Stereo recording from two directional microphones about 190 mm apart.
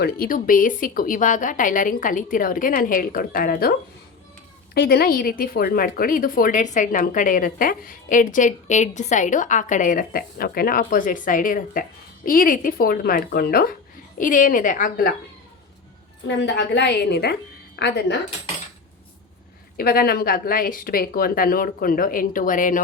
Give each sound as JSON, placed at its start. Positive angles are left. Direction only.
{"t": 0.0, "sound": "a woman's voice", "side_deg": 50}
{"t": 16.2, "sound": "a woman's voice", "side_deg": 65}
{"t": 19.7, "sound": "a woman's voice", "side_deg": 50}